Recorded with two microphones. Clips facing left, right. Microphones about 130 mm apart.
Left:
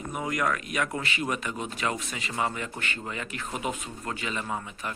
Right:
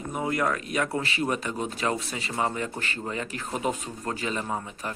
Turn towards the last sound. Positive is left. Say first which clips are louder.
# right 2 dB
turn(degrees=-30)  # may be behind; listen again after turning